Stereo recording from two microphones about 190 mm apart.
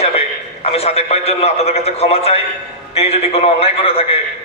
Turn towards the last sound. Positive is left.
turn(degrees=30)  # may be behind; listen again after turning